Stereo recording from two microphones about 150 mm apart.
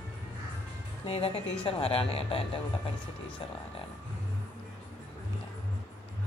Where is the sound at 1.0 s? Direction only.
35° left (ahead or behind).